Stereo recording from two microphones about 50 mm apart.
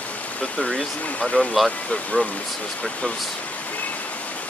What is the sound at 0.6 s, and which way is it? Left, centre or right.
Speech, centre.